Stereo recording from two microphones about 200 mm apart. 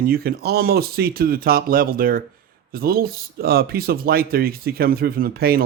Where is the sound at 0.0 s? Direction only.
50° right (ahead or behind).